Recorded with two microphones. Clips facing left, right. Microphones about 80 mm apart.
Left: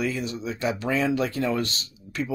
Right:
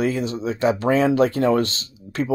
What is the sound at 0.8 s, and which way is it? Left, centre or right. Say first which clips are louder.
Speech: right 7 dB; right.